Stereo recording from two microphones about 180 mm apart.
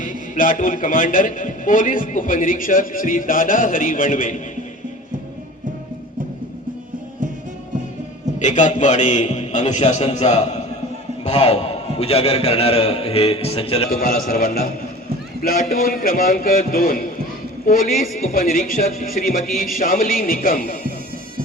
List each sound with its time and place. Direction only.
0.0 s a man's voice: 45° left (ahead or behind)
8.4 s a man's voice: 40° left (ahead or behind)
13.9 s a man's voice: 55° left (ahead or behind)